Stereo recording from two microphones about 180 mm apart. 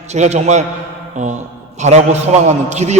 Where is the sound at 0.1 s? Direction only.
40° right (ahead or behind).